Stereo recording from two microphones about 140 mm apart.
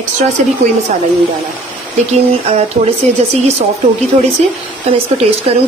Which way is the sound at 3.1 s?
50° right (ahead or behind).